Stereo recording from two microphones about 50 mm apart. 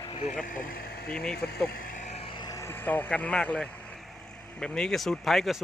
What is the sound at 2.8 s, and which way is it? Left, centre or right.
Speech, left.